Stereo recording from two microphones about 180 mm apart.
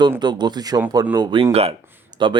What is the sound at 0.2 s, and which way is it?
Speech, 25° right (ahead or behind).